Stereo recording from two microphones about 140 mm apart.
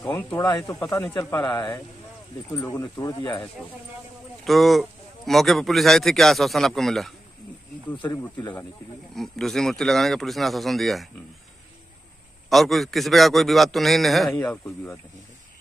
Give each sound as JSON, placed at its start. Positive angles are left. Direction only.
{"t": 0.1, "sound": "speech", "side_deg": 15}
{"t": 4.5, "sound": "a man's voice", "side_deg": 0}
{"t": 8.1, "sound": "speech", "side_deg": 25}
{"t": 9.1, "sound": "a man's voice", "side_deg": 0}
{"t": 12.4, "sound": "a man's voice", "side_deg": 0}
{"t": 14.3, "sound": "speech", "side_deg": 15}